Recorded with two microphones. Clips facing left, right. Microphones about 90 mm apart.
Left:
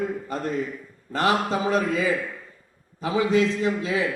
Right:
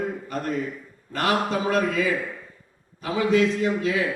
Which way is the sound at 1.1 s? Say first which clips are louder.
Left 1 dB; 30° left (ahead or behind).